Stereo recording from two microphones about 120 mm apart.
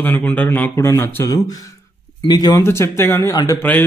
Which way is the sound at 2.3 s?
35° left (ahead or behind).